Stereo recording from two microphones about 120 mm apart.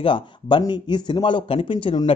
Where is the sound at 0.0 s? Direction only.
45° left (ahead or behind).